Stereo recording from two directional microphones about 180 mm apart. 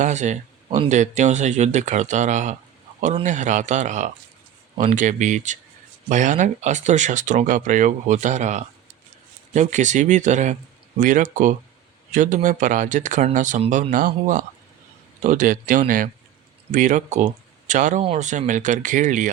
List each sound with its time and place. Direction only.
0.0 s speech: 40° right (ahead or behind)